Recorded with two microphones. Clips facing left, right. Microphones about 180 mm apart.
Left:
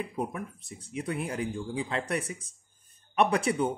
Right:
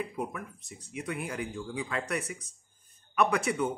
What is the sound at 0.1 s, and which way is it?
Speech, 30° left (ahead or behind).